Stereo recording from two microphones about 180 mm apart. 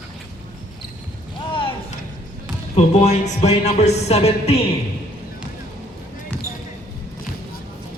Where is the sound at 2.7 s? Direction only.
40° left (ahead or behind).